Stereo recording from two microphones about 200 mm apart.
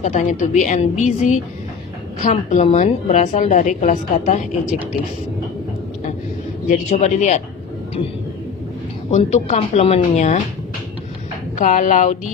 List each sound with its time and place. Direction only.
0.0 s a woman's voice: 40° left (ahead or behind)
6.7 s a woman's voice: 35° left (ahead or behind)
9.1 s a woman's voice: 35° left (ahead or behind)
11.5 s a woman's voice: 40° left (ahead or behind)